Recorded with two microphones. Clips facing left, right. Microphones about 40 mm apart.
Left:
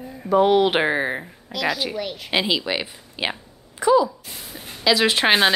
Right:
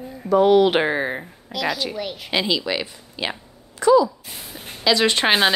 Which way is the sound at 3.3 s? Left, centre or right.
Centre.